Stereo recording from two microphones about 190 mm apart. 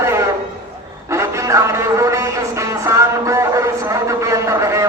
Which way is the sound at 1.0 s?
15° right (ahead or behind).